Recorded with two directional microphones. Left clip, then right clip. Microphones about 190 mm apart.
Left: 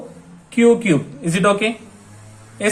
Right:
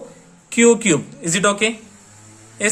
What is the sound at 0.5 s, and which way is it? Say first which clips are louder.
Speech: even; 40° right (ahead or behind).